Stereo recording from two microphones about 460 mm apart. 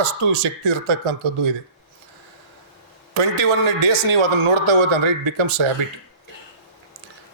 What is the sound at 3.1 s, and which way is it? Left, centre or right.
A man's voice, right.